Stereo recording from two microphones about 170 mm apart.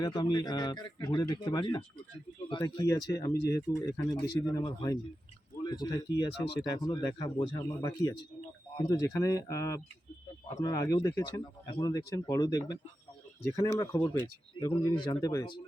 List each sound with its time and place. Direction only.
0.0 s speech: 25° left (ahead or behind)